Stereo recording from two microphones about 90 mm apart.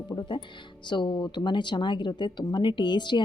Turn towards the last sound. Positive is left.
turn(degrees=60)  # may be behind; listen again after turning